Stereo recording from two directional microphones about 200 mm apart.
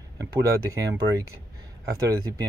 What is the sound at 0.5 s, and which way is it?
Speech, 15° right (ahead or behind).